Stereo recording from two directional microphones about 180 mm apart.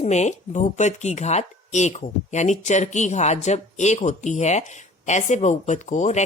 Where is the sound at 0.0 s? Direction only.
40° left (ahead or behind).